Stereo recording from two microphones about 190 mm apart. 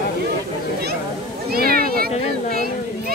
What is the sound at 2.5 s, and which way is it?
Children playing, 50° right (ahead or behind).